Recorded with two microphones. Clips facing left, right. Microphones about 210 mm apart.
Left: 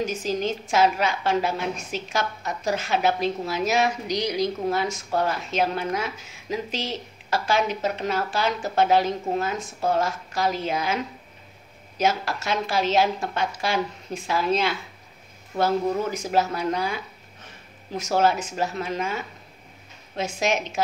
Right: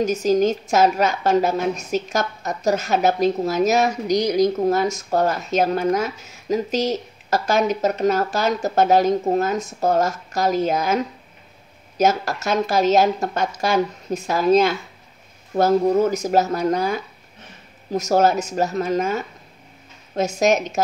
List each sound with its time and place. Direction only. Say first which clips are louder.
0.0 s a woman's voice: right 8 dB; 40° right (ahead or behind)
12.0 s a woman's voice: right 5 dB; 45° right (ahead or behind)